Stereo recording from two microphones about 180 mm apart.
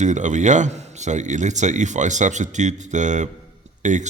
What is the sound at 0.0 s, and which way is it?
Speech, 40° right (ahead or behind).